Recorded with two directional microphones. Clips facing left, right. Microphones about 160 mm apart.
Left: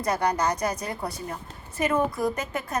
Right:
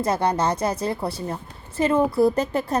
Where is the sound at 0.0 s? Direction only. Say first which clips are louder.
Right 3 dB; 25° right (ahead or behind).